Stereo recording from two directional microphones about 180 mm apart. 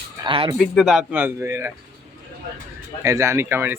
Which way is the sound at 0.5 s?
Centre (ahead or behind).